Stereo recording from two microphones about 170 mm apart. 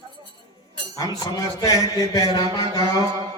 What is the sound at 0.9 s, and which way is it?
A man's voice, 20° left (ahead or behind).